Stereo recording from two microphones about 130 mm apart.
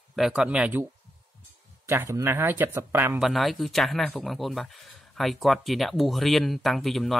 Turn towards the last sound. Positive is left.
turn(degrees=0)  # may be behind; listen again after turning